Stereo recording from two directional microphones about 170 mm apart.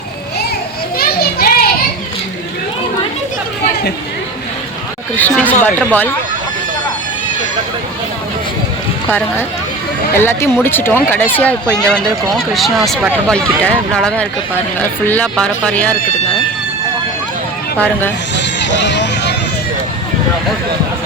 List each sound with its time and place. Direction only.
0.9 s children playing: 60° left (ahead or behind)
5.1 s a sound: 10° left (ahead or behind)
5.9 s speech: 10° left (ahead or behind)
10.2 s speech: 15° left (ahead or behind)
17.7 s speech: 10° left (ahead or behind)
18.6 s a sound: 90° left